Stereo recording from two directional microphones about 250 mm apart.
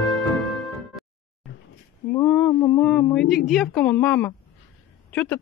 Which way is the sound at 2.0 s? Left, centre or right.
Centre.